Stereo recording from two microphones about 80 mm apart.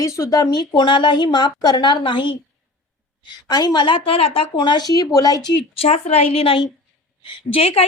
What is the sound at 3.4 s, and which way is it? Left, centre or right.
Speech, left.